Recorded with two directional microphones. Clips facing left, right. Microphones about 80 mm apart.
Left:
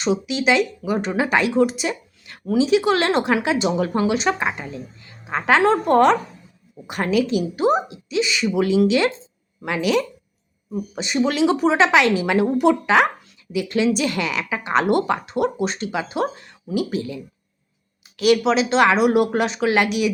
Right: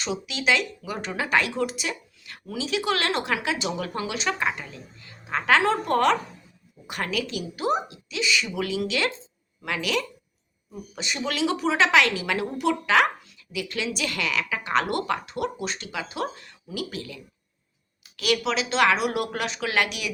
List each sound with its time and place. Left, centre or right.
0.0 s a woman's voice: left